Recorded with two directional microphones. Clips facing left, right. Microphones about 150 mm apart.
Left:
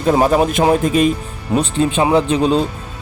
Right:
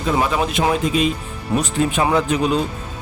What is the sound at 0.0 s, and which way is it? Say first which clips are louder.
Speech: left 6 dB; 40° left (ahead or behind).